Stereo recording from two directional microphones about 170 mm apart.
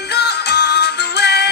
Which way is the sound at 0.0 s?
75° left (ahead or behind).